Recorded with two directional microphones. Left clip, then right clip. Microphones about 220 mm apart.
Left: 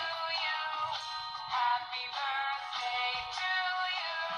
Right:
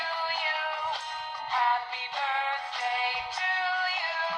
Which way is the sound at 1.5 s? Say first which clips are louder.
Right 5 dB; 35° right (ahead or behind).